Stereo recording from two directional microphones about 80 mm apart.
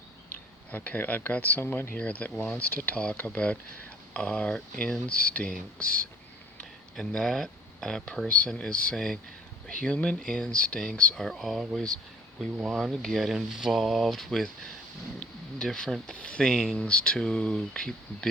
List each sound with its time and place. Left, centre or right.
0.7 s speech: left; by 11.6 s centre
12.6 s speech: centre
15.5 s speech: centre